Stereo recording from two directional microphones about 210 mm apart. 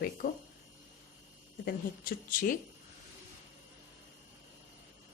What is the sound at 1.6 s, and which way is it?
Speech, 45° left (ahead or behind).